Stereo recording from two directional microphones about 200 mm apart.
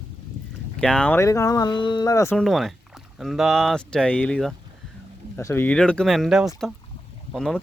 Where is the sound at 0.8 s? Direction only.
5° left (ahead or behind).